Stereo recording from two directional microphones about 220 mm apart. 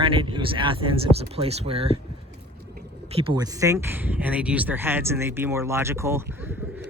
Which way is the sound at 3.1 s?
25° right (ahead or behind).